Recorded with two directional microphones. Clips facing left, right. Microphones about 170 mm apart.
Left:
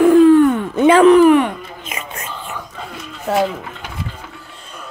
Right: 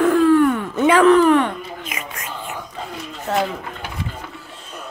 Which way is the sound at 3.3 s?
10° left (ahead or behind).